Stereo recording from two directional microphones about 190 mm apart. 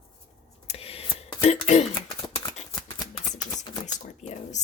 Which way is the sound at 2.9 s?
20° left (ahead or behind).